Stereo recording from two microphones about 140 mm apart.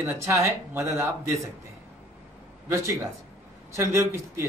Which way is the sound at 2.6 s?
20° right (ahead or behind).